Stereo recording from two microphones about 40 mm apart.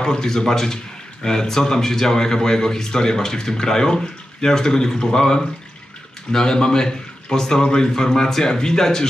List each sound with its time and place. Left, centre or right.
0.0 s a man's voice: centre